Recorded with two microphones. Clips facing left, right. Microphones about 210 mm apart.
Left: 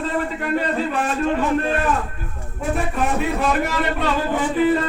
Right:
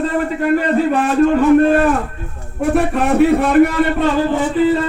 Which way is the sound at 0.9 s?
60° right (ahead or behind).